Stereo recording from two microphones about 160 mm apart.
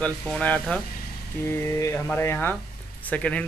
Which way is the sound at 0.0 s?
10° left (ahead or behind).